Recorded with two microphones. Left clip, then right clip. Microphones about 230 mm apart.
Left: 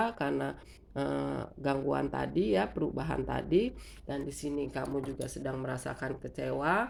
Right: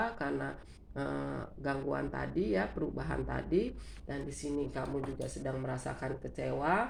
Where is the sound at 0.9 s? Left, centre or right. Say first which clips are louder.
Left 4 dB; left.